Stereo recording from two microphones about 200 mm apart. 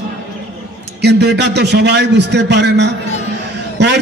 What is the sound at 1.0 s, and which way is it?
A man's voice, 55° right (ahead or behind).